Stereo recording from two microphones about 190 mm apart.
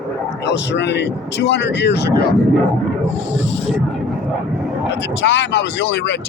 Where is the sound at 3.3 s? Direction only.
75° left (ahead or behind).